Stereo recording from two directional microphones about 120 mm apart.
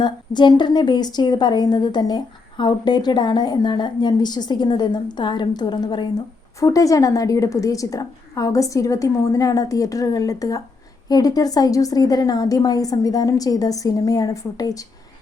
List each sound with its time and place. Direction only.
0.0 s a woman's voice: 40° left (ahead or behind)